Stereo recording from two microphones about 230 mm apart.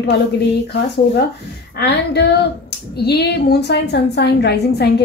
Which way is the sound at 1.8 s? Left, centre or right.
Left.